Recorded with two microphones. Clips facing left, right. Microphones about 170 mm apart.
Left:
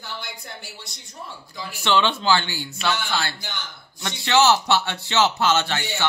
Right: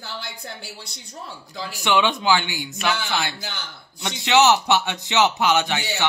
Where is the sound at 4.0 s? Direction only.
15° right (ahead or behind).